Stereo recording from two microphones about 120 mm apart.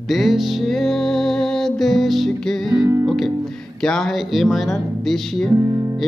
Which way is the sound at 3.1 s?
Centre (ahead or behind).